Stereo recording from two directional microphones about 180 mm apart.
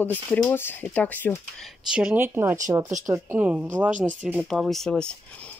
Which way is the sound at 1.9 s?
5° right (ahead or behind).